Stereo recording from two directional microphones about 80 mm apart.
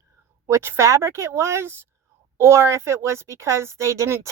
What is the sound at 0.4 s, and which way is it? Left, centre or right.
Speech, right.